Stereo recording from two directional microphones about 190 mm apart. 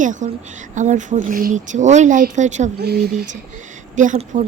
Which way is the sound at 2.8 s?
55° right (ahead or behind).